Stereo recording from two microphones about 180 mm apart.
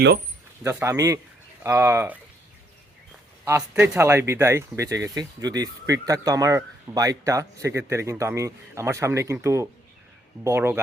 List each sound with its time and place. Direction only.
0.6 s speech: 15° right (ahead or behind)
3.4 s speech: 15° right (ahead or behind)